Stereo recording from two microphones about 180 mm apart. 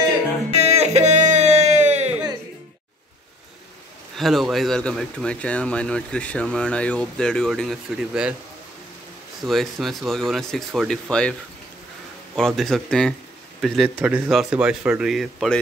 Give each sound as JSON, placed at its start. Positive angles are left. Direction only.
{"t": 0.5, "sound": "a sound", "side_deg": -35}
{"t": 4.2, "sound": "speech", "side_deg": 0}
{"t": 9.4, "sound": "speech", "side_deg": 0}
{"t": 12.4, "sound": "a man's voice", "side_deg": 0}